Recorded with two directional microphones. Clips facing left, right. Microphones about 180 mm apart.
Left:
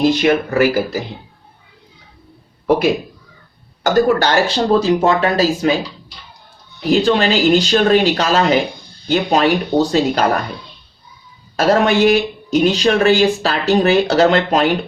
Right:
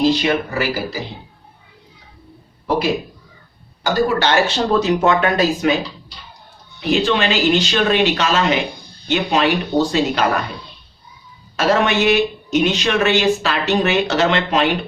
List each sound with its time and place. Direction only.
0.0 s speech: 50° left (ahead or behind)
3.8 s speech: 40° left (ahead or behind)
6.9 s speech: 40° left (ahead or behind)
11.5 s speech: 40° left (ahead or behind)